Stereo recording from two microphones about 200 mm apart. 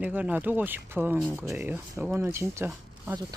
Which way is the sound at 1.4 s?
15° right (ahead or behind).